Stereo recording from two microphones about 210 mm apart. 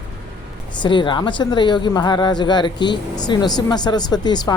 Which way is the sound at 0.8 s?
20° left (ahead or behind).